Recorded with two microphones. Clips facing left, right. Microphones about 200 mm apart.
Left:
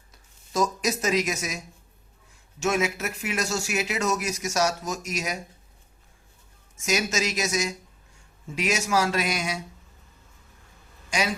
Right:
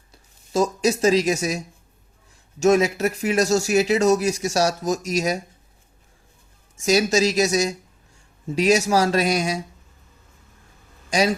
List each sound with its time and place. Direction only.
0.1 s speech: 30° right (ahead or behind)
6.7 s speech: 35° right (ahead or behind)
11.1 s speech: 35° right (ahead or behind)